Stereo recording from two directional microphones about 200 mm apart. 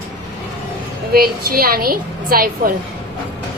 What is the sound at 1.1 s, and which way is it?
A woman's voice, 50° right (ahead or behind).